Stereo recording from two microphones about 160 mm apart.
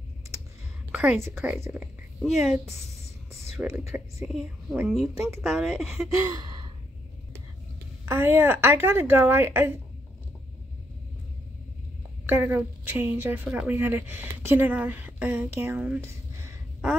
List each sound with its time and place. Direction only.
0.9 s a woman's voice: 10° right (ahead or behind)
3.5 s a woman's voice: 5° right (ahead or behind)
5.1 s a woman's voice: 15° right (ahead or behind)
5.4 s a woman's voice: centre (ahead or behind)
6.1 s gasp: 20° right (ahead or behind)
8.0 s a woman's voice: 15° right (ahead or behind)
12.3 s a woman's voice: 10° right (ahead or behind)